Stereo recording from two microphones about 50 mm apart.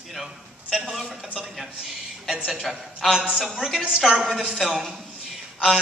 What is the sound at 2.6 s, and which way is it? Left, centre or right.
A woman's voice, centre.